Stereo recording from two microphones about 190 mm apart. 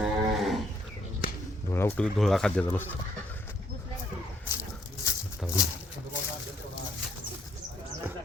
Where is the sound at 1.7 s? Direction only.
10° left (ahead or behind).